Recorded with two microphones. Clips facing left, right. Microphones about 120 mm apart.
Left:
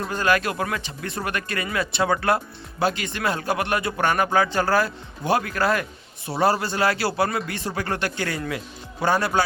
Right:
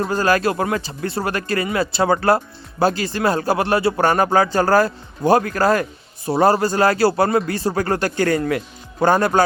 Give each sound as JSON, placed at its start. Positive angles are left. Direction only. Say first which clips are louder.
{"t": 0.0, "sound": "speech", "louder": "right 5 dB", "side_deg": -35}